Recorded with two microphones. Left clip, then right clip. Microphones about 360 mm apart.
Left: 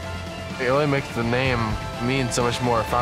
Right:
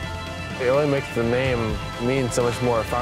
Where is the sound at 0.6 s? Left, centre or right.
Right.